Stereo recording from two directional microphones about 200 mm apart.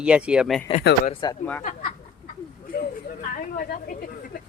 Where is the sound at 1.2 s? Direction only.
20° left (ahead or behind).